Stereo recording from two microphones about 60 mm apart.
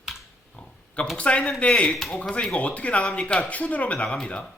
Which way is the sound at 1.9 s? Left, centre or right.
Centre.